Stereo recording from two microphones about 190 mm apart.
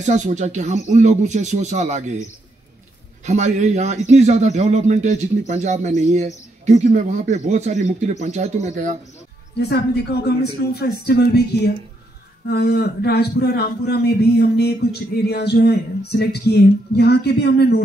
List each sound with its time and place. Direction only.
0.0 s speech: 40° right (ahead or behind)
3.3 s speech: 40° right (ahead or behind)
10.2 s a man's voice: 60° left (ahead or behind)